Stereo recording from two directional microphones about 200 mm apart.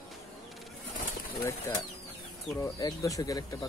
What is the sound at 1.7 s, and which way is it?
Speech, 15° left (ahead or behind).